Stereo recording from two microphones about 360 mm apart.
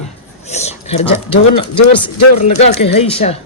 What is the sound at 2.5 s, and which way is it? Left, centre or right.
Speech, centre.